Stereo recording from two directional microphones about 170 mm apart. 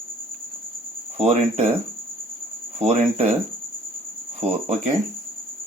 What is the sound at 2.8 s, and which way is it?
Speech, 40° right (ahead or behind).